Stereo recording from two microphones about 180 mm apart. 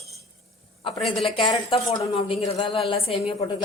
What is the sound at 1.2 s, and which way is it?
A woman's voice, 30° left (ahead or behind).